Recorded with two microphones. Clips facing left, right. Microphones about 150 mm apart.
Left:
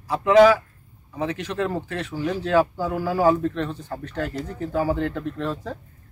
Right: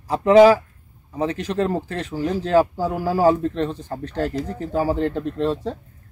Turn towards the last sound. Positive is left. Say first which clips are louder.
# right 5 dB
turn(degrees=-35)  # may be behind; listen again after turning